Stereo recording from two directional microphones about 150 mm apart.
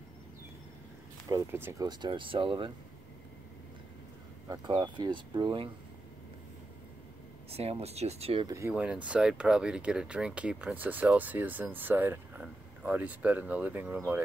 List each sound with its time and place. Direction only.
1.3 s speech: 15° right (ahead or behind)
1.9 s speech: 30° right (ahead or behind)
4.5 s speech: 30° right (ahead or behind)
7.5 s speech: 45° right (ahead or behind)
8.5 s speech: 20° right (ahead or behind)
8.7 s speech: 10° right (ahead or behind)